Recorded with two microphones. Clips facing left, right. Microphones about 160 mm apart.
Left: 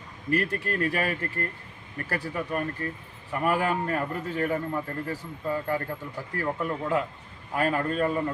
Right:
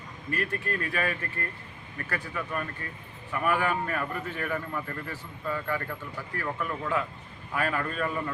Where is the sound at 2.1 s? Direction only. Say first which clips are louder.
Left 4 dB; 30° left (ahead or behind).